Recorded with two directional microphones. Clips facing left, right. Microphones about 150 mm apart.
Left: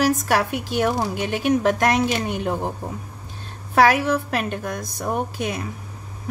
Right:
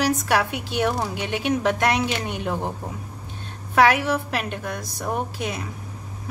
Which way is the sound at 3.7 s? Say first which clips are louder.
Left 1 dB; 40° left (ahead or behind).